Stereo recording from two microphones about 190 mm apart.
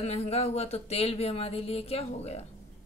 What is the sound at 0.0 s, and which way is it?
Speech, 35° left (ahead or behind).